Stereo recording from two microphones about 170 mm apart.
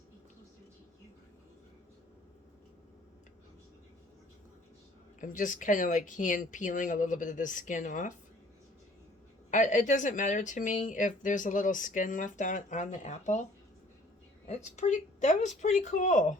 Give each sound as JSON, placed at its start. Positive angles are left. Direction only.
{"t": 5.2, "sound": "speech", "side_deg": 50}
{"t": 9.5, "sound": "speech", "side_deg": 45}
{"t": 14.4, "sound": "speech", "side_deg": 40}